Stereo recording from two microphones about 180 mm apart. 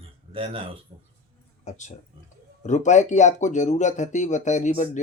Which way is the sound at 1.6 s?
40° left (ahead or behind).